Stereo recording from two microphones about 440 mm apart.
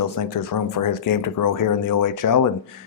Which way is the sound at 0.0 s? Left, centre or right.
Left.